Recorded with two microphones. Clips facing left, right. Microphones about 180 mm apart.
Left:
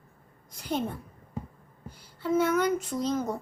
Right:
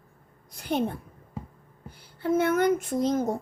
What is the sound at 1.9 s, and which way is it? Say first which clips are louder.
Speech: right 1 dB; 60° right (ahead or behind).